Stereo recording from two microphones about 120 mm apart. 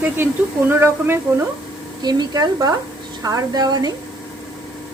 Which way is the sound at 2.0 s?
35° right (ahead or behind).